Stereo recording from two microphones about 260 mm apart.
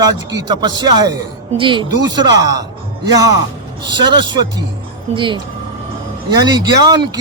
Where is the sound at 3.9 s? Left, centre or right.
Centre.